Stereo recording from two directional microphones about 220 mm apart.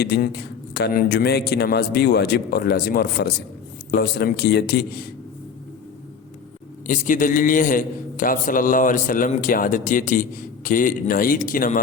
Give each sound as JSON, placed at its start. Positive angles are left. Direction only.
{"t": 0.0, "sound": "a man's voice", "side_deg": 45}
{"t": 6.8, "sound": "a man's voice", "side_deg": 35}